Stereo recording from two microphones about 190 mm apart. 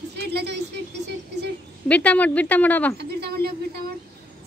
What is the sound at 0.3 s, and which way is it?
Speech, 60° right (ahead or behind).